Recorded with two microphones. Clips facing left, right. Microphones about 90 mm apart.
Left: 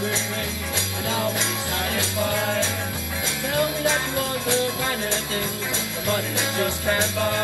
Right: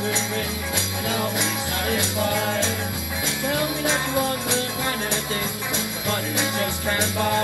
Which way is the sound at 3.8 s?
20° right (ahead or behind).